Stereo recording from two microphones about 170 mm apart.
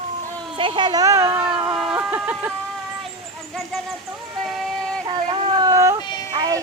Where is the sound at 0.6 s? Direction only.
30° right (ahead or behind); by 1.5 s 15° right (ahead or behind).